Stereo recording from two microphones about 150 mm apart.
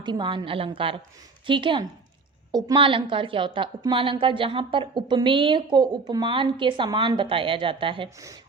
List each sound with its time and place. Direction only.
0.0 s a woman's voice: 30° right (ahead or behind)